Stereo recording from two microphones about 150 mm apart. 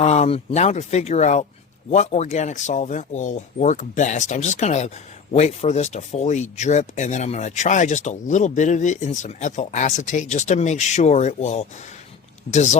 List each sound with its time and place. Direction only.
0.0 s speech: 45° left (ahead or behind)